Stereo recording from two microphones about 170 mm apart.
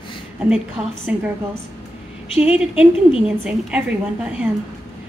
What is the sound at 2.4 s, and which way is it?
A woman's voice, 5° right (ahead or behind).